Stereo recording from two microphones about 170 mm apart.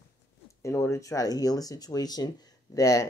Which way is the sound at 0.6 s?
15° left (ahead or behind).